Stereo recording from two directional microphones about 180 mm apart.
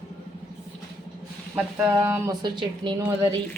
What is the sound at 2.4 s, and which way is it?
Speech, 25° right (ahead or behind).